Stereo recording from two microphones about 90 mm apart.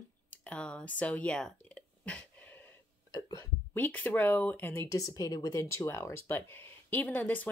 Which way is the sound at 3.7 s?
20° left (ahead or behind).